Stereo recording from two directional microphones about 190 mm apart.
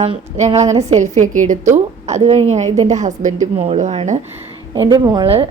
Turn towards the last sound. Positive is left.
turn(degrees=-25)  # may be behind; listen again after turning